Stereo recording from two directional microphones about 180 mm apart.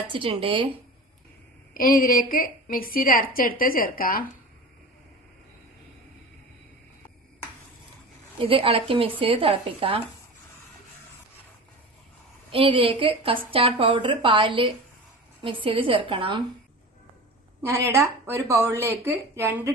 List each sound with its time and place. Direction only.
0.1 s a woman's voice: 30° right (ahead or behind)
1.7 s a woman's voice: 50° left (ahead or behind)
8.4 s speech: 30° right (ahead or behind)
12.5 s a woman's voice: 30° right (ahead or behind)
17.6 s a woman's voice: 15° right (ahead or behind)